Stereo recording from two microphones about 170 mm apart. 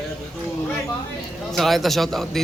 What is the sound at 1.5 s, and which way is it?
Speech, centre (ahead or behind).